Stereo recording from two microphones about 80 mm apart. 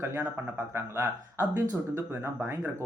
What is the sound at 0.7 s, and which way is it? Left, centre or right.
Speech, right.